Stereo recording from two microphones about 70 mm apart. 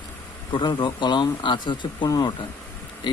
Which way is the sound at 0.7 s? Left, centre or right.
Left.